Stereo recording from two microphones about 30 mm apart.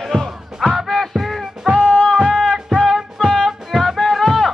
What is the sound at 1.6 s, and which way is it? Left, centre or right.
Music, right.